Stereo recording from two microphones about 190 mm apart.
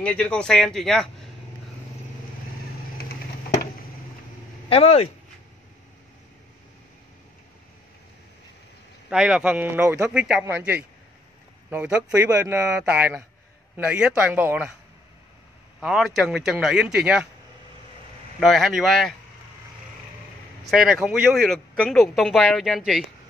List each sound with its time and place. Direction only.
0.0 s speech: 5° left (ahead or behind)
4.6 s speech: 30° left (ahead or behind)
9.1 s speech: 5° right (ahead or behind)
15.8 s speech: 5° right (ahead or behind)
18.4 s speech: centre (ahead or behind)
20.7 s speech: centre (ahead or behind)